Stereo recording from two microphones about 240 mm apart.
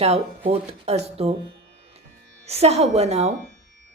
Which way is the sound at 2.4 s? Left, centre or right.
Right.